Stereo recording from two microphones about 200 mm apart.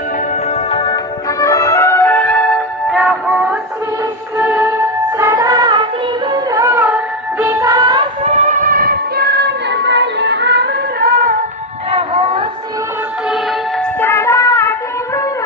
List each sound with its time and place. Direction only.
0.7 s music: 25° left (ahead or behind); by 11.3 s 45° right (ahead or behind)
14.0 s music: 15° left (ahead or behind)